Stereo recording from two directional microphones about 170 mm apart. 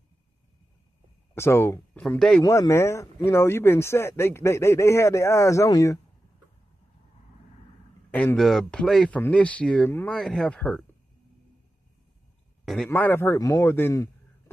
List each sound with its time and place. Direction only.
1.3 s speech: 15° left (ahead or behind)
2.4 s speech: 20° left (ahead or behind)
8.1 s speech: 10° left (ahead or behind)
12.6 s speech: 5° left (ahead or behind)